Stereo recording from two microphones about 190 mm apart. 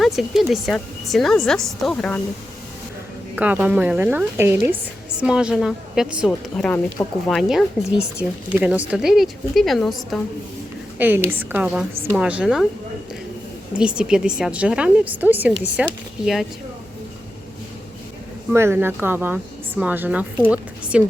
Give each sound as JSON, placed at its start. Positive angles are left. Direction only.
{"t": 0.0, "sound": "a woman's voice", "side_deg": 0}
{"t": 3.3, "sound": "a woman's voice", "side_deg": -10}
{"t": 10.9, "sound": "a woman's voice", "side_deg": -10}
{"t": 13.7, "sound": "a woman's voice", "side_deg": -5}
{"t": 18.5, "sound": "a woman's voice", "side_deg": -10}